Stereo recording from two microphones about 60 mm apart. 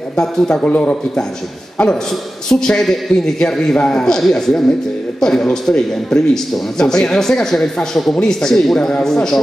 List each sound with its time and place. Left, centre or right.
0.1 s a man's voice: centre
0.7 s speech: left
2.5 s a man's voice: centre